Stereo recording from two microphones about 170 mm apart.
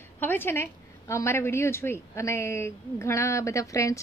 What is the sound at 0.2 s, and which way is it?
A woman's voice, 10° left (ahead or behind).